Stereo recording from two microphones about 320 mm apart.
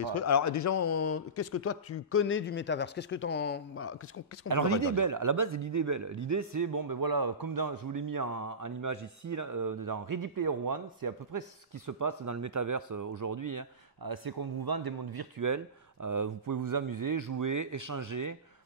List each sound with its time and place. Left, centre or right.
0.0 s a man's voice: left
4.5 s a man's voice: right